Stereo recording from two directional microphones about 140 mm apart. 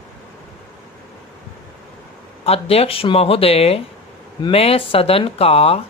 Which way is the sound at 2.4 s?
45° left (ahead or behind).